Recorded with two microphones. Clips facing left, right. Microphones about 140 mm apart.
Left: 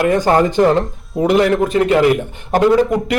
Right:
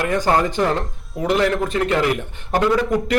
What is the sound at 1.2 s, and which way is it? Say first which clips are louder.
Speech: left 6 dB; 25° left (ahead or behind).